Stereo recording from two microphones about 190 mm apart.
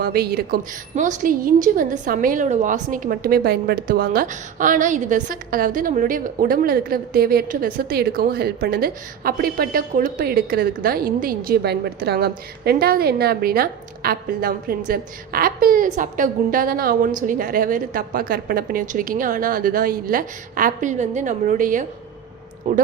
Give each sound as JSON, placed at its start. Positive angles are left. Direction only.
{"t": 0.0, "sound": "a woman's voice", "side_deg": -55}
{"t": 0.9, "sound": "a woman's voice", "side_deg": -40}